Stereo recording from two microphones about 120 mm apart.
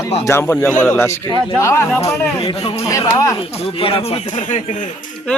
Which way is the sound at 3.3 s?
55° left (ahead or behind).